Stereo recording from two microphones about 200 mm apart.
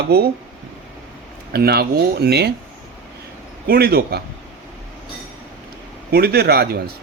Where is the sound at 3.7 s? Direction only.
50° right (ahead or behind).